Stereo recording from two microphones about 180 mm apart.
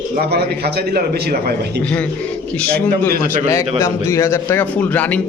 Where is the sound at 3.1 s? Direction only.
55° right (ahead or behind).